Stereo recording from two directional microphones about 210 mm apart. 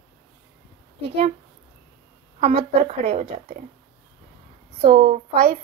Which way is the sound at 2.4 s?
35° right (ahead or behind).